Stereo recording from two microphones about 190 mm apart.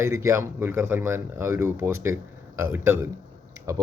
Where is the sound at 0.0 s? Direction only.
15° right (ahead or behind).